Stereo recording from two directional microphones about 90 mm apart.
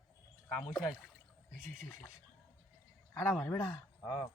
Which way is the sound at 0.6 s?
5° left (ahead or behind).